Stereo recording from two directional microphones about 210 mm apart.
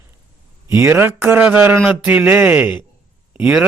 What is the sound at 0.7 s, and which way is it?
Speech, 10° right (ahead or behind).